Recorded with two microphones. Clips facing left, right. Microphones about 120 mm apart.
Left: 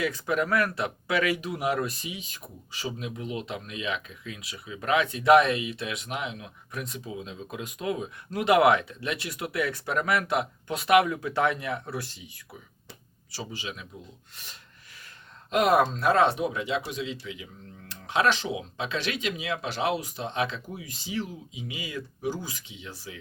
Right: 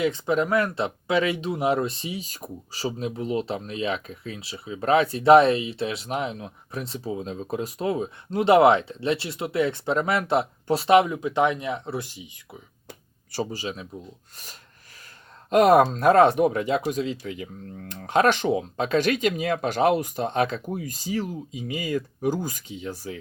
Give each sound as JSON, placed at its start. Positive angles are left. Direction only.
{"t": 0.0, "sound": "speech", "side_deg": -25}
{"t": 12.9, "sound": "a sound", "side_deg": -50}
{"t": 15.4, "sound": "speech", "side_deg": -45}